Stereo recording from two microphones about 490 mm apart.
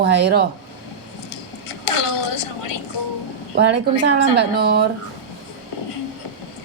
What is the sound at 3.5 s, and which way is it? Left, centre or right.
A woman's voice, right.